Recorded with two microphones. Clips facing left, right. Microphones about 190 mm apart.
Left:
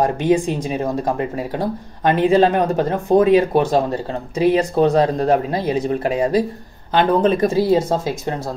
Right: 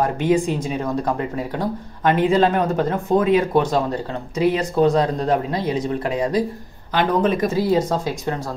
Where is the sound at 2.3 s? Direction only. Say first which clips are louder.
Left 3 dB; 30° left (ahead or behind).